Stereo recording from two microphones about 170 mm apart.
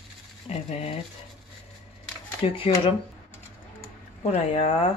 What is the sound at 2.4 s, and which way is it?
Speech, 35° left (ahead or behind).